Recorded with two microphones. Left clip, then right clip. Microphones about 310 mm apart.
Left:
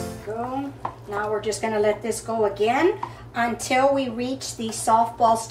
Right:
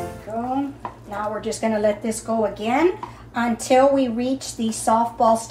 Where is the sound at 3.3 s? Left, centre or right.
Centre.